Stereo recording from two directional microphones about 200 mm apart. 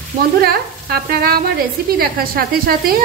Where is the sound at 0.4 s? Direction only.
50° right (ahead or behind).